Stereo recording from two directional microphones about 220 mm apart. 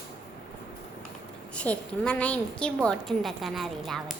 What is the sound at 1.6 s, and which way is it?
A woman's voice, 5° left (ahead or behind).